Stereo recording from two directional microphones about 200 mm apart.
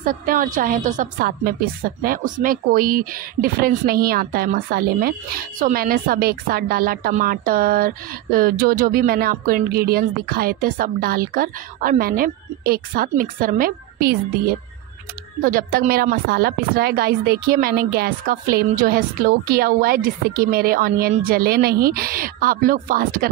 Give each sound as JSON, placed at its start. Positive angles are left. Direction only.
{"t": 0.0, "sound": "a woman's voice", "side_deg": -45}
{"t": 15.4, "sound": "a woman's voice", "side_deg": -45}